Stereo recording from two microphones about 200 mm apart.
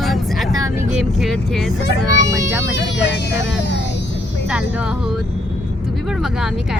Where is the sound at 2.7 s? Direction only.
60° left (ahead or behind).